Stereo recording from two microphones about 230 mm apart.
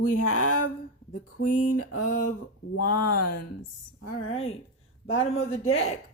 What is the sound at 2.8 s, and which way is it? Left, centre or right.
Speech, left.